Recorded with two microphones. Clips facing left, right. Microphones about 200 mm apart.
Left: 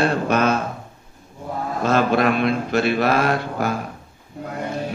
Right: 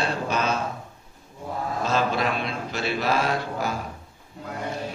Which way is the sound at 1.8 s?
55° left (ahead or behind).